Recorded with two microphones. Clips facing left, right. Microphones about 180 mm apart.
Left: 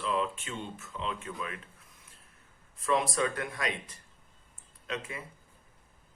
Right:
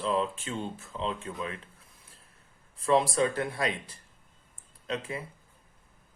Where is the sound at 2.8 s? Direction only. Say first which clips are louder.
Right 4 dB; 30° right (ahead or behind).